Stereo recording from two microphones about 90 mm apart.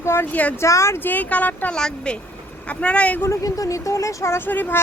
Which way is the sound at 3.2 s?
40° left (ahead or behind).